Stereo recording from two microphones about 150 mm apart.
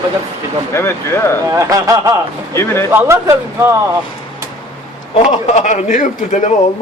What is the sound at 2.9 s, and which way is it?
Speech, 20° right (ahead or behind).